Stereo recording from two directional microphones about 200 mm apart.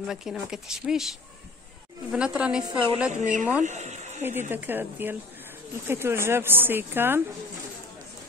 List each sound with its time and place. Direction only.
0.0 s speech: centre (ahead or behind)
3.1 s speech: 40° right (ahead or behind)
4.2 s speech: 10° right (ahead or behind)